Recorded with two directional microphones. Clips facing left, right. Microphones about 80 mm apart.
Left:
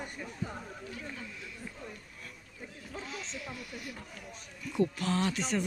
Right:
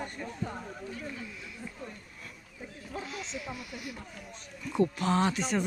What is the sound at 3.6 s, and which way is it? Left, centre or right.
Speech, centre.